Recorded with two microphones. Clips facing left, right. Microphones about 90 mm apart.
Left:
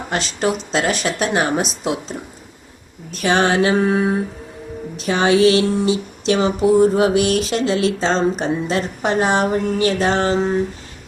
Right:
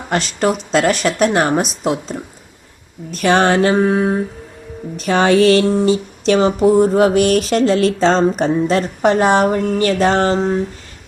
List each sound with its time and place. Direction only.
0.1 s speech: 50° right (ahead or behind)